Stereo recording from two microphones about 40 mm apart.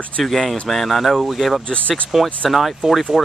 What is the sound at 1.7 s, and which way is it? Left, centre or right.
Speech, left.